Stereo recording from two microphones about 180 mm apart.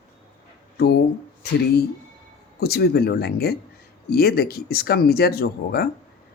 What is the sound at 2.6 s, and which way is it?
Speech, 60° left (ahead or behind).